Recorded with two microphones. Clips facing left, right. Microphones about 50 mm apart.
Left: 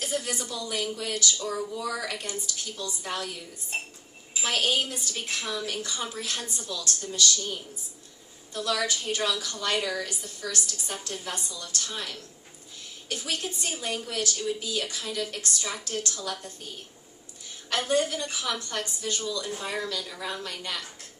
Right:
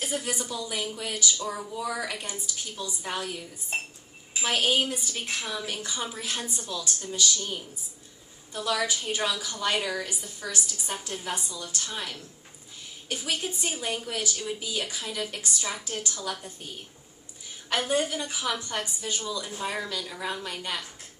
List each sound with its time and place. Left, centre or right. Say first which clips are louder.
0.0 s speech: even; centre
17.7 s speech: left 1 dB; centre